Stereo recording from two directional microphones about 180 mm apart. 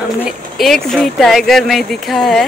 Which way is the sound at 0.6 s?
Centre (ahead or behind).